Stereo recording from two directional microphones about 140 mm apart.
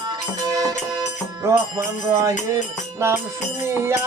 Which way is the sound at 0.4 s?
25° right (ahead or behind).